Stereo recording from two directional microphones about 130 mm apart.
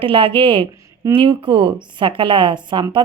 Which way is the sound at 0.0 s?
45° right (ahead or behind).